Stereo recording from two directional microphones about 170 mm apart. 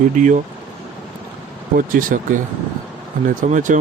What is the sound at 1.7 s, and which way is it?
Speech, 55° right (ahead or behind).